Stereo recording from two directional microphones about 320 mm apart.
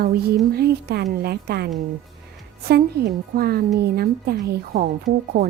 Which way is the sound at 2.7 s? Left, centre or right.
Right.